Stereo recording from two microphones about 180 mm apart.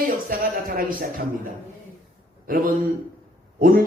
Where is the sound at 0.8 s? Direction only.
55° right (ahead or behind).